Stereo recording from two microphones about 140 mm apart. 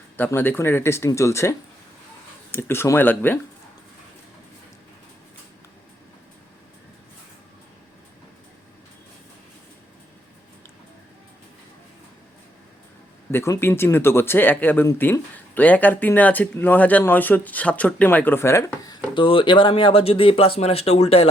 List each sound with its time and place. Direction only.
0.2 s speech: 15° left (ahead or behind)
13.3 s speech: 20° left (ahead or behind)
19.1 s speech: 40° left (ahead or behind)